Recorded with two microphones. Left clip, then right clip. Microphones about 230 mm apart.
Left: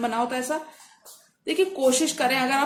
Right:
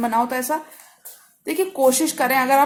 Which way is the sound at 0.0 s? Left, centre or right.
Right.